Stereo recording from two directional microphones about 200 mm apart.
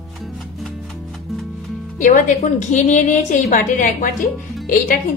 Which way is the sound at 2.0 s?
40° left (ahead or behind).